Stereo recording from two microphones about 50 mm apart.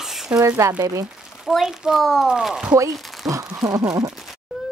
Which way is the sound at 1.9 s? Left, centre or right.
Centre.